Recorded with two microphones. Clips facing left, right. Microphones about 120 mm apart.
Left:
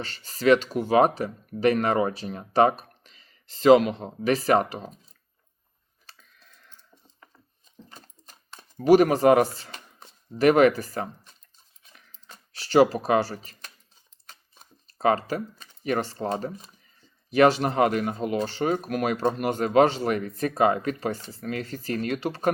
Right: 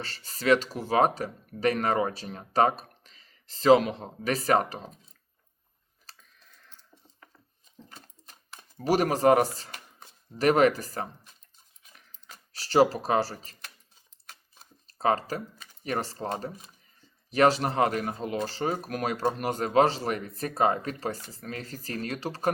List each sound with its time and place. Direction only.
0.2 s speech: 40° left (ahead or behind)
0.4 s speech: 40° right (ahead or behind)
6.1 s coin: 40° right (ahead or behind)
8.8 s speech: 40° right (ahead or behind)
12.5 s speech: 40° right (ahead or behind)
14.8 s speech: 40° right (ahead or behind)
17.3 s speech: 40° right (ahead or behind)